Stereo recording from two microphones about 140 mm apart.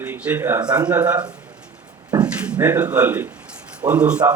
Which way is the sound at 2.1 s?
10° right (ahead or behind).